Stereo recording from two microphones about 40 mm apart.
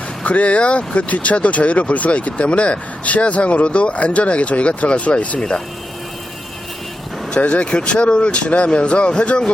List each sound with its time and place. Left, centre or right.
0.3 s speech: left
5.4 s speech: left
7.3 s speech: left